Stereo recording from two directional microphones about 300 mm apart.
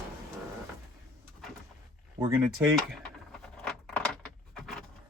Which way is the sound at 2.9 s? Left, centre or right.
Centre.